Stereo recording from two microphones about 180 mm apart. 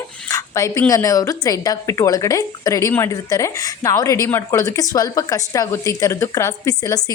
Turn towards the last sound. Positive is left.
turn(degrees=20)  # may be behind; listen again after turning